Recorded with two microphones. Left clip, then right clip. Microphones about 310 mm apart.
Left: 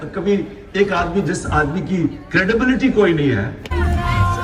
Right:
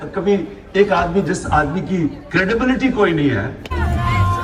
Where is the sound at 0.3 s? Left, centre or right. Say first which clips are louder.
Right 1 dB; centre.